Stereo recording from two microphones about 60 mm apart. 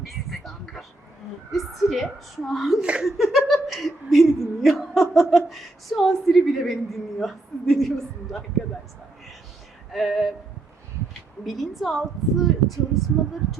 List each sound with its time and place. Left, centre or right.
0.1 s a sound: centre
1.5 s a woman's voice: centre
2.8 s speech: centre
3.2 s a woman's voice: centre
9.9 s a woman's voice: centre
11.4 s a woman's voice: centre